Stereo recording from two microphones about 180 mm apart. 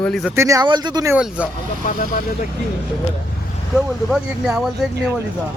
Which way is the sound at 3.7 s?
Centre (ahead or behind).